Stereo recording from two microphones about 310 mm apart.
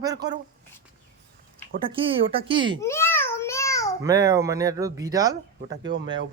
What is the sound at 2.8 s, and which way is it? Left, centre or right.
Babbling, centre.